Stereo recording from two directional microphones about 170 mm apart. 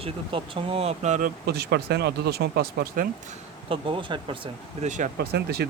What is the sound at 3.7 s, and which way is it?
Speech, 30° right (ahead or behind).